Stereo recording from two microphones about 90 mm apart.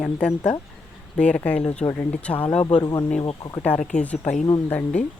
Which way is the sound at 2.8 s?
45° left (ahead or behind).